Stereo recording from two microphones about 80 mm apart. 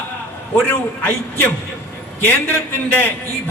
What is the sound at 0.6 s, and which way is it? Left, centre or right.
Speech, centre.